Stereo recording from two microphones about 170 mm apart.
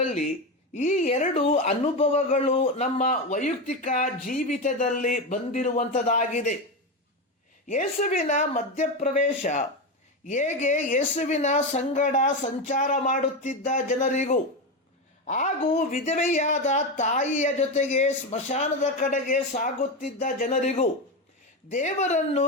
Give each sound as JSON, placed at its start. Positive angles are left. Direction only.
{"t": 0.7, "sound": "speech", "side_deg": 45}
{"t": 7.7, "sound": "speech", "side_deg": 50}